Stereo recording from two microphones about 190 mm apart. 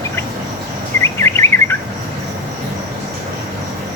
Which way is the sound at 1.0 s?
15° left (ahead or behind).